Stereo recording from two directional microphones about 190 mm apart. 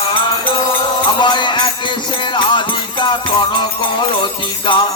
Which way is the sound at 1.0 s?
25° left (ahead or behind).